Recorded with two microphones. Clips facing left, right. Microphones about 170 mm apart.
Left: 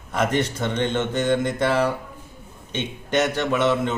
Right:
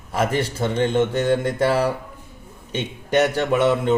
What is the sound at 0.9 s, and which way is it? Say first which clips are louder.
Speech: right 4 dB; 35° right (ahead or behind).